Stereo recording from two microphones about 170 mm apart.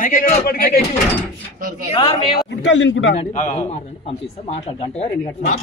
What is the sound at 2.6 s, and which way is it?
Speech, 90° left.